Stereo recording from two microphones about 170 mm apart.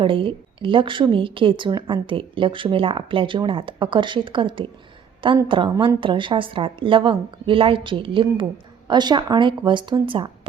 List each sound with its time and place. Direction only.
0.0 s a woman's voice: 30° right (ahead or behind)